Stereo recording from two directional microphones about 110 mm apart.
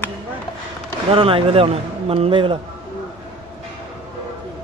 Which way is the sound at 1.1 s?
55° right (ahead or behind).